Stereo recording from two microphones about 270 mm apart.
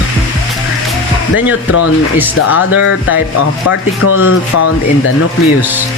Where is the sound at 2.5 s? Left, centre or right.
Left.